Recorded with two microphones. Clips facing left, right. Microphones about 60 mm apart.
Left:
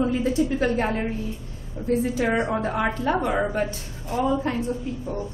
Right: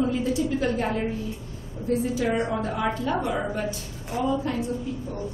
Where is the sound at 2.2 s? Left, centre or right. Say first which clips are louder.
Left 2 dB; left.